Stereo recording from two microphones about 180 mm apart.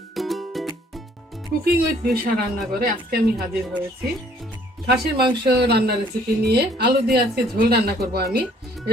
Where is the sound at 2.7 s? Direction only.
55° right (ahead or behind).